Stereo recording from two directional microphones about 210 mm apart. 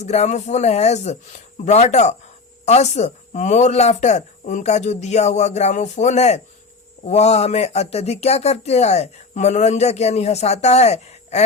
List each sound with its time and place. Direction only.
0.0 s speech: 30° left (ahead or behind)